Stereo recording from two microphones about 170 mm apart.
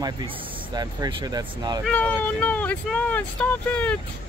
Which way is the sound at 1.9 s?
10° left (ahead or behind).